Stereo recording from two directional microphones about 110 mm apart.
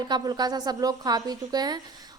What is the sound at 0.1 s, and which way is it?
A woman's voice, 40° right (ahead or behind).